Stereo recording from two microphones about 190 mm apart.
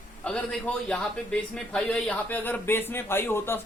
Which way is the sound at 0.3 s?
5° left (ahead or behind).